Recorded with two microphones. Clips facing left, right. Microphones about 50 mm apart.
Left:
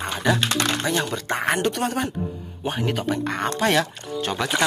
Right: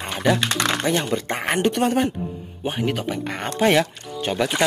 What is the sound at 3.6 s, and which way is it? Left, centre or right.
Speech, centre.